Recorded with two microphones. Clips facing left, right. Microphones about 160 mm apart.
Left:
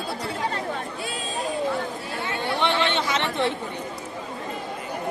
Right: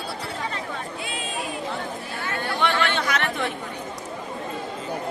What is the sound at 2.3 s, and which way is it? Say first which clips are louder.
Chatter: even; 25° left (ahead or behind).